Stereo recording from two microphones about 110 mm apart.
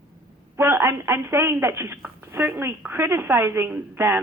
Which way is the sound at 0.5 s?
20° right (ahead or behind).